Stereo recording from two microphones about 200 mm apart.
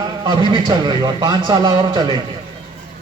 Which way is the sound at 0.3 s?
20° right (ahead or behind).